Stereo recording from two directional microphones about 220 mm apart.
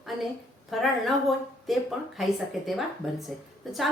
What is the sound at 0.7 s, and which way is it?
A woman's voice, centre (ahead or behind).